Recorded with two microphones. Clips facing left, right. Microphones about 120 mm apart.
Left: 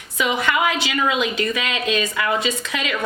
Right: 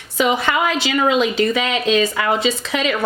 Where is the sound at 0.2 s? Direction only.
30° right (ahead or behind).